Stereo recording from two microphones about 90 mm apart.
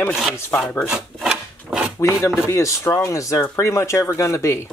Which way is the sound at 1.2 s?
10° right (ahead or behind).